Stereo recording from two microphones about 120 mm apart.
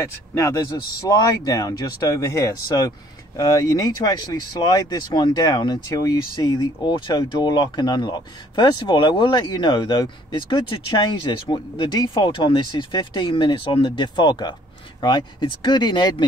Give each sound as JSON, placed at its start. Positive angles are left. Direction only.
{"t": 0.3, "sound": "speech", "side_deg": 30}